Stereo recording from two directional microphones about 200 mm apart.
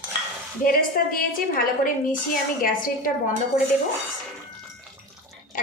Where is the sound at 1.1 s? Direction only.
45° left (ahead or behind).